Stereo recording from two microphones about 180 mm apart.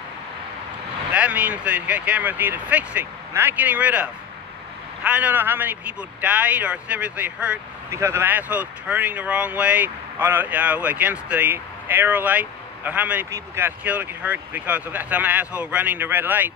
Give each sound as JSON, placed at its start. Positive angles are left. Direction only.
{"t": 1.1, "sound": "speech", "side_deg": -5}